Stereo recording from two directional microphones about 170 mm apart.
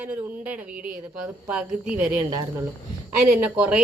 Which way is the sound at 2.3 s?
20° right (ahead or behind).